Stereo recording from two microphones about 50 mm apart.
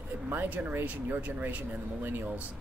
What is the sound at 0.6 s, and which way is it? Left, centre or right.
Speech, right.